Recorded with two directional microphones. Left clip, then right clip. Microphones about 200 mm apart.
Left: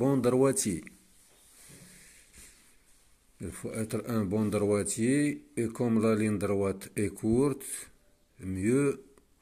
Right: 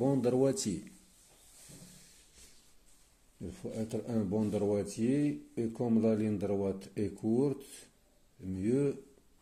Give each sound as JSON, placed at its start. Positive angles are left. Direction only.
{"t": 0.0, "sound": "speech", "side_deg": 25}
{"t": 3.4, "sound": "speech", "side_deg": 30}